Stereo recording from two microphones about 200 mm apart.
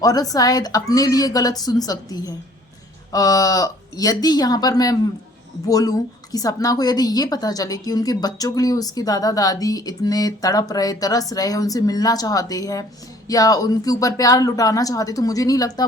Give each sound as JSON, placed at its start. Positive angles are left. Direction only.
{"t": 0.0, "sound": "a woman's voice", "side_deg": 20}